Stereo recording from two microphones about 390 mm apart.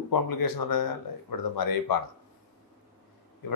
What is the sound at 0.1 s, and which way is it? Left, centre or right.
Speech, left.